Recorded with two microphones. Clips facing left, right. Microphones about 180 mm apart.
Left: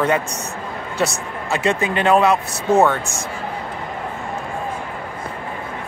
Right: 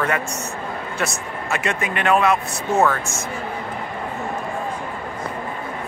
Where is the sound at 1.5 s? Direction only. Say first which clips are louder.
Left 5 dB; 30° left (ahead or behind).